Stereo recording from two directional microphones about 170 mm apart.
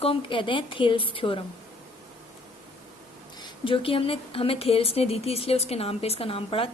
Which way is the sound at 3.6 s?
30° left (ahead or behind).